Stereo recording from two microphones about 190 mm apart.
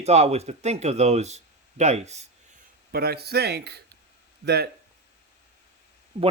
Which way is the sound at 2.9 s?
55° right (ahead or behind).